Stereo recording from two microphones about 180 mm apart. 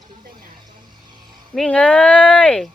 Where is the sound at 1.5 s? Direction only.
5° left (ahead or behind).